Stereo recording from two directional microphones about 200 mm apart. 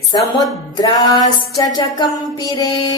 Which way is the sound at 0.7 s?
20° left (ahead or behind).